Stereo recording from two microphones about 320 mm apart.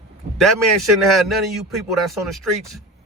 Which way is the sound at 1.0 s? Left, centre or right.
Centre.